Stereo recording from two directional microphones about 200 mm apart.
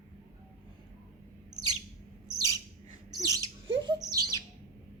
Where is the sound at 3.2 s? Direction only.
15° right (ahead or behind).